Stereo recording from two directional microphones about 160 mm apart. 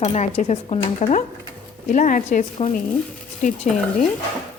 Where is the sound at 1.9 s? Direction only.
50° left (ahead or behind).